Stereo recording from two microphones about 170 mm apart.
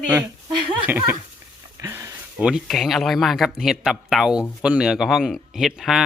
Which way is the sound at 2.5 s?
Centre (ahead or behind).